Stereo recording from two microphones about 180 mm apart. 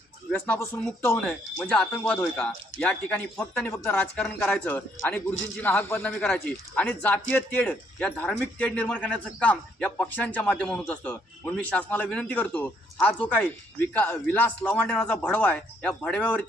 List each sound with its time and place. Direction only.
0.3 s speech: 10° left (ahead or behind)